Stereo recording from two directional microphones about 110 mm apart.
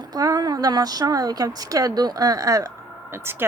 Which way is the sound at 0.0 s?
35° right (ahead or behind).